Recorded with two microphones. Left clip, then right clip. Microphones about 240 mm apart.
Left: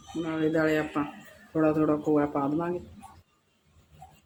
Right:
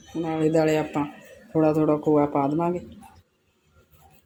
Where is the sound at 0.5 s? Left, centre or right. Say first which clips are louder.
Right 4 dB; centre.